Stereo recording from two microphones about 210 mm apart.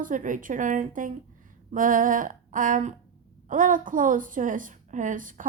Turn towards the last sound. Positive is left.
turn(degrees=-40)  # may be behind; listen again after turning